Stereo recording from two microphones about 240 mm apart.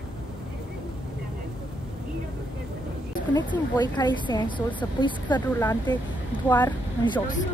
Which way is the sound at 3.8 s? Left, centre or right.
Centre.